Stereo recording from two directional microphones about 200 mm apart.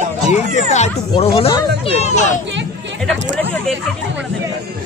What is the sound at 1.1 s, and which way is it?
Speech, 25° left (ahead or behind).